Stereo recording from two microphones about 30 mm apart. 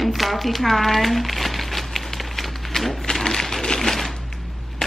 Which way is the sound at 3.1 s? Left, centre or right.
Centre.